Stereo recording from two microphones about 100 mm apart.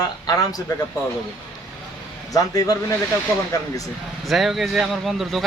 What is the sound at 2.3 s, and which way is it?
Speech, 35° left (ahead or behind).